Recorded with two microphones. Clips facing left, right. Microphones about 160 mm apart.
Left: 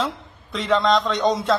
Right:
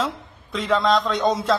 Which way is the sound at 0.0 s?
Centre (ahead or behind).